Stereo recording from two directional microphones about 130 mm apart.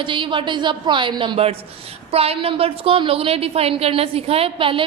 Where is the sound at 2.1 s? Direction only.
50° right (ahead or behind).